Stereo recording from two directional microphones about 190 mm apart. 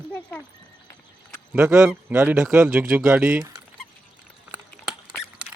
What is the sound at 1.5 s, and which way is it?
A man's voice, 5° right (ahead or behind).